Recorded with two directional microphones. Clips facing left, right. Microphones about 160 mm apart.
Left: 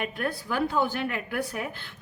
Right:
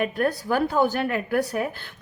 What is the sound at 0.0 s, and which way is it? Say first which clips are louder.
A woman's voice: right 7 dB; 40° right (ahead or behind).